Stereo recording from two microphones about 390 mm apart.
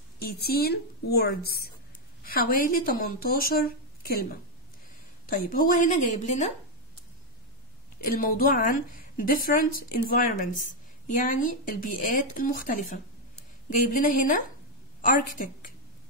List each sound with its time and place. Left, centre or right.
0.2 s a woman's voice: left
8.0 s a woman's voice: left